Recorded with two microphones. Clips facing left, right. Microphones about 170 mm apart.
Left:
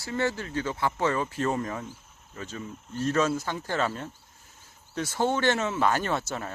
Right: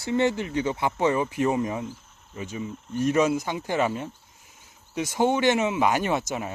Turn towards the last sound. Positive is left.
turn(degrees=-15)  # may be behind; listen again after turning